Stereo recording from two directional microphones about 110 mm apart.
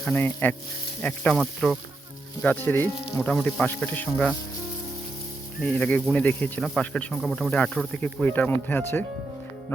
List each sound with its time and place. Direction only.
0.0 s speech: 15° left (ahead or behind)
1.4 s speech: centre (ahead or behind)
2.4 s speech: 15° left (ahead or behind)
5.6 s speech: 10° left (ahead or behind)
7.5 s speech: 10° left (ahead or behind)